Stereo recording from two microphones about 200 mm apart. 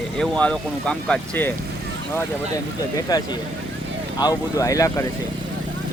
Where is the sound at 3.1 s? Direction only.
20° left (ahead or behind).